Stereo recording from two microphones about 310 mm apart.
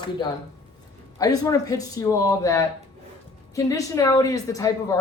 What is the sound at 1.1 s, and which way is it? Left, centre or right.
Speech, centre.